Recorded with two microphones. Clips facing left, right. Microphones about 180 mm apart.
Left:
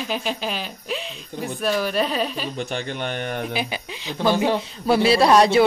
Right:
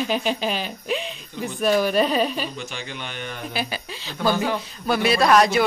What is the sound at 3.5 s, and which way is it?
A man's voice, 15° left (ahead or behind).